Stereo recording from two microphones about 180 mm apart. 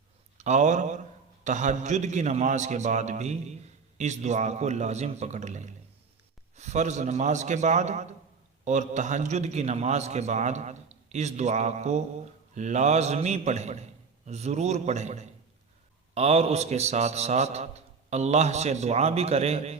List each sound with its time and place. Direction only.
0.3 s a man's voice: 40° right (ahead or behind)